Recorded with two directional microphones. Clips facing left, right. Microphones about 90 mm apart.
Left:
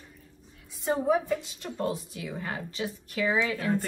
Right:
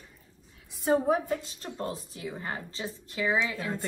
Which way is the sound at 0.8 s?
40° right (ahead or behind).